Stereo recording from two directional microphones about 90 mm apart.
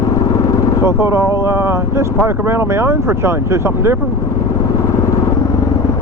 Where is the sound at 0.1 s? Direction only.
35° left (ahead or behind).